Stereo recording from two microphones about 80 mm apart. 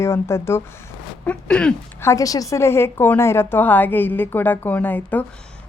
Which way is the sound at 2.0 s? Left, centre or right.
Left.